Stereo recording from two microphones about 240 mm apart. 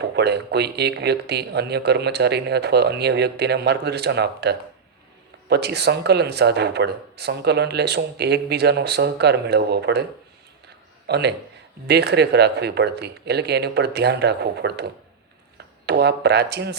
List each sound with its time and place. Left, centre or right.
0.0 s a man's voice: right